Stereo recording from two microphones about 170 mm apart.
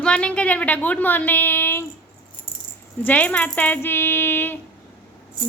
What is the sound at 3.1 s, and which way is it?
A woman's voice, 10° left (ahead or behind).